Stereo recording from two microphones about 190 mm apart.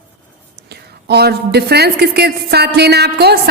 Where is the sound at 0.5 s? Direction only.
60° right (ahead or behind).